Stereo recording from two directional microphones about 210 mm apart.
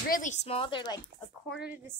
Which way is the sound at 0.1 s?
35° left (ahead or behind).